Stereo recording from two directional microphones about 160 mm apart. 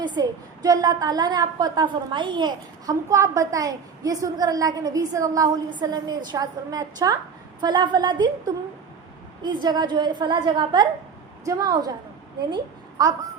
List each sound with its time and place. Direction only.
0.0 s a woman's voice: 25° right (ahead or behind)